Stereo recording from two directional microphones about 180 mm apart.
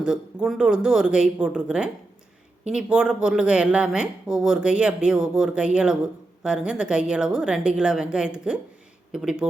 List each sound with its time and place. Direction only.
0.0 s speech: 5° right (ahead or behind)